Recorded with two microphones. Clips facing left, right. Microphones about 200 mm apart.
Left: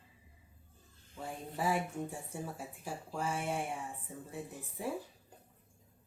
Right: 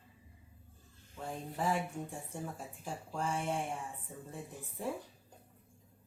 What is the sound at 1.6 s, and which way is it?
A woman's voice, 5° left (ahead or behind).